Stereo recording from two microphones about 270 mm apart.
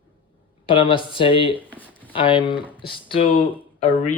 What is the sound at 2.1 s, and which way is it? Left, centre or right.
Speech, centre.